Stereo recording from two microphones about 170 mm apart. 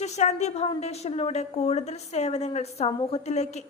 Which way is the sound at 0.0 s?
45° left (ahead or behind).